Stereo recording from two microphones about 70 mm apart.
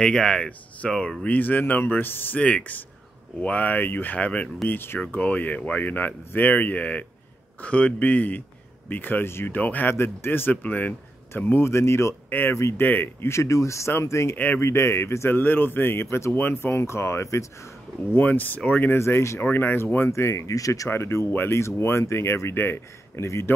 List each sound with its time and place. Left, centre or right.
0.0 s speech: centre
1.2 s speech: left
4.6 s speech: left
12.3 s speech: left
12.5 s speech: left
12.8 s speech: left
14.3 s speech: left
14.6 s speech: left
18.1 s speech: left
18.9 s speech: left
19.4 s speech: left
20.1 s speech: left
20.9 s speech: left